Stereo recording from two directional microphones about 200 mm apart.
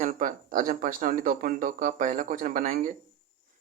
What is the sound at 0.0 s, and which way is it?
Speech, 40° right (ahead or behind).